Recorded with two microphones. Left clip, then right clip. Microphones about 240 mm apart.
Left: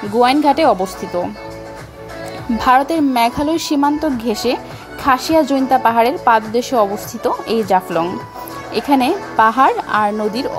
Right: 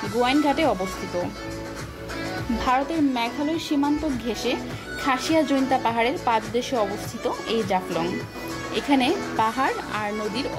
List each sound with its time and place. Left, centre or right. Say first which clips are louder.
0.2 s a woman's voice: left 9 dB; left
2.6 s a woman's voice: left 10 dB; left